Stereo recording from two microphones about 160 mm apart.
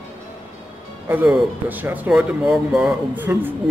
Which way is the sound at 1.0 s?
10° right (ahead or behind).